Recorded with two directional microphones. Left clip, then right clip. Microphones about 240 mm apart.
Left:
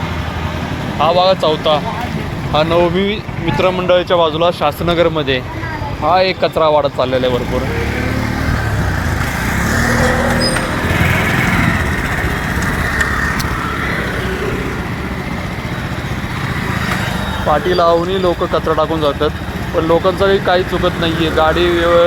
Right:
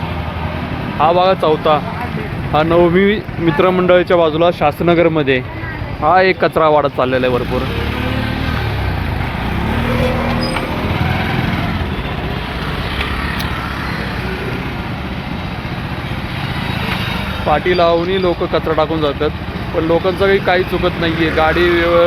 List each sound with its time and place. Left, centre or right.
1.0 s speech: centre
17.7 s speech: centre